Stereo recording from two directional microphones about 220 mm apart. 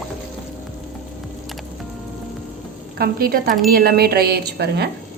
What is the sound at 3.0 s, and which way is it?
Speech, 45° right (ahead or behind).